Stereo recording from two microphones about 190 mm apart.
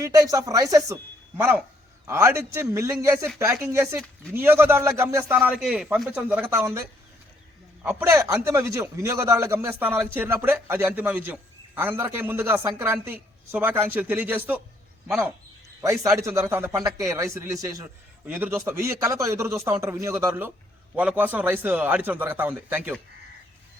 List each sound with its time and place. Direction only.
0.0 s speech: 20° right (ahead or behind)
7.9 s speech: 10° right (ahead or behind)
15.8 s speech: 15° right (ahead or behind)